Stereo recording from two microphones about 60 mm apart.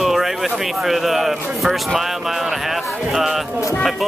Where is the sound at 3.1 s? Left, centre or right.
Centre.